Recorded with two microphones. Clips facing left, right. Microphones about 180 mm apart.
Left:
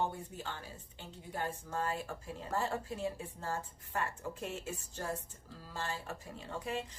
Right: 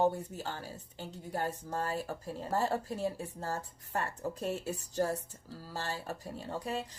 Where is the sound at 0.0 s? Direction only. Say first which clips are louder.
Right 7 dB; 40° right (ahead or behind).